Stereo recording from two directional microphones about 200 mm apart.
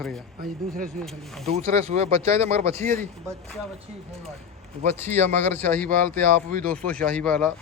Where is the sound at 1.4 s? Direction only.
30° right (ahead or behind).